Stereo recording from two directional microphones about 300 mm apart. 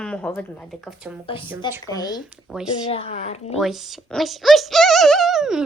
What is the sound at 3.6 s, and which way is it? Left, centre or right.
Speech, centre.